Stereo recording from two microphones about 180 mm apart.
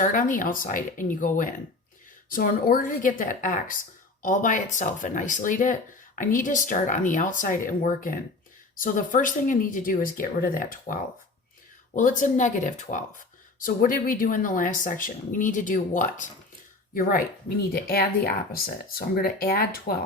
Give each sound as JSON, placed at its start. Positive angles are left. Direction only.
{"t": 0.0, "sound": "speech", "side_deg": 50}
{"t": 11.9, "sound": "speech", "side_deg": 45}